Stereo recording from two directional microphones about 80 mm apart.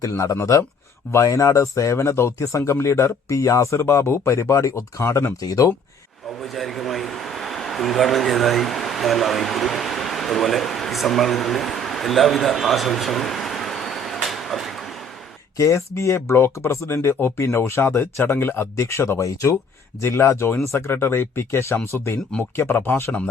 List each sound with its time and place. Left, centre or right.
0.0 s speech: left
6.2 s a sound: centre
15.5 s speech: left